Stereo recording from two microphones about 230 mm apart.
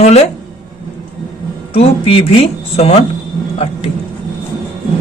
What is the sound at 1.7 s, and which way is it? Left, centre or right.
A woman's voice, left.